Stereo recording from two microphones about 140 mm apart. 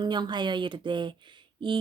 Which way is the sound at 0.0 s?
30° right (ahead or behind).